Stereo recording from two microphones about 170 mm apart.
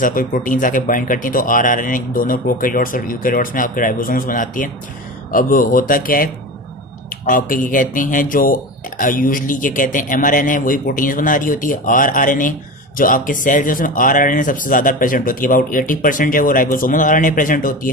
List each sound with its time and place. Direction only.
0.0 s speech: 55° left (ahead or behind)